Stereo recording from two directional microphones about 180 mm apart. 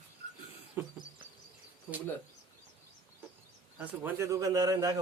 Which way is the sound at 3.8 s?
10° right (ahead or behind).